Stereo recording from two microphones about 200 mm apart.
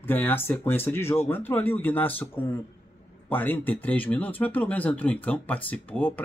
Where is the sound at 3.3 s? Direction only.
10° left (ahead or behind).